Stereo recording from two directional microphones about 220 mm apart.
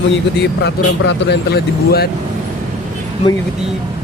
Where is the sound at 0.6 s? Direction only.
50° left (ahead or behind).